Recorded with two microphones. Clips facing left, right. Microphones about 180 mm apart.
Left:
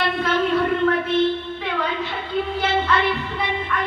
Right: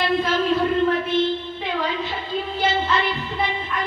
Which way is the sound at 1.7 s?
60° left (ahead or behind).